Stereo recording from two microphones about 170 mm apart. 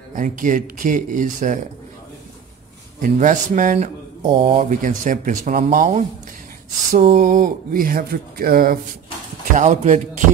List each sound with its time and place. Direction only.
0.1 s speech: 50° right (ahead or behind)
3.0 s speech: 50° right (ahead or behind)
4.6 s speech: 50° right (ahead or behind)
7.0 s speech: 40° right (ahead or behind); by 8.7 s 60° right (ahead or behind)
9.6 s speech: 45° right (ahead or behind)